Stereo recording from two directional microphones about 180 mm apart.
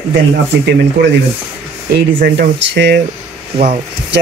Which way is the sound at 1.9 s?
70° right (ahead or behind).